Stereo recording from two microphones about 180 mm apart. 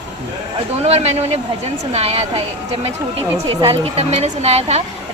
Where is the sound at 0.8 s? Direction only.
35° right (ahead or behind).